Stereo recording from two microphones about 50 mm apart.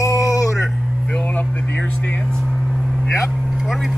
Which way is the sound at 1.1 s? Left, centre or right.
Left.